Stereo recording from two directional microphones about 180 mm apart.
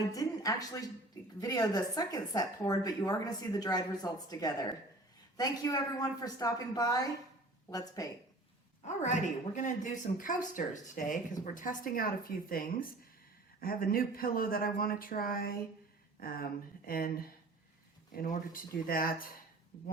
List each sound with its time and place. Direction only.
0.1 s speech: 20° left (ahead or behind)
8.8 s speech: 40° left (ahead or behind)